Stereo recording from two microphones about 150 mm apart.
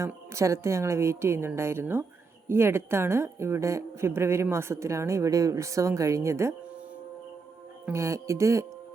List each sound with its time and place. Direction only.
0.0 s a woman's voice: 20° right (ahead or behind)
7.9 s a woman's voice: 20° right (ahead or behind)